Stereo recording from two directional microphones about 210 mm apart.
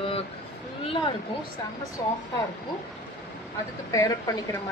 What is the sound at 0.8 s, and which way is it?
A woman's voice, 25° left (ahead or behind).